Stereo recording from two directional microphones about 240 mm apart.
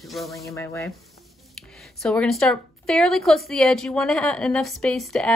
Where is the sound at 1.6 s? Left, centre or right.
Centre.